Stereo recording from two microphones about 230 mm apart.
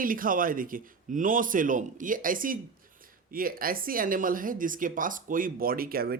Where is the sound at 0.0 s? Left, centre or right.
Right.